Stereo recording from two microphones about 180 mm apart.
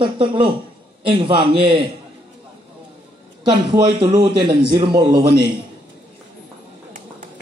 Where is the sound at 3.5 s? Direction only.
25° right (ahead or behind).